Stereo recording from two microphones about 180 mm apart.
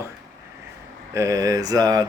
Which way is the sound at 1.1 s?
20° right (ahead or behind).